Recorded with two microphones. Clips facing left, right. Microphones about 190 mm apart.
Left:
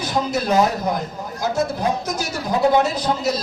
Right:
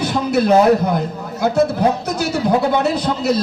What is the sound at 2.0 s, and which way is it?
A man's voice, 65° right (ahead or behind).